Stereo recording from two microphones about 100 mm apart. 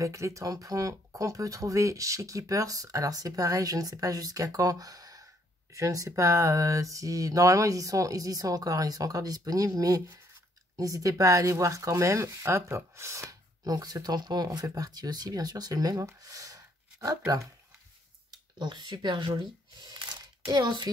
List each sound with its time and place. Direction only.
0.0 s speech: 30° right (ahead or behind)
18.6 s speech: 45° right (ahead or behind)
19.9 s a sound: 50° right (ahead or behind)
20.6 s speech: 50° right (ahead or behind)